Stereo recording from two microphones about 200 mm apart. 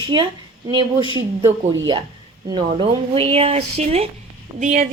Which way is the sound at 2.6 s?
30° right (ahead or behind).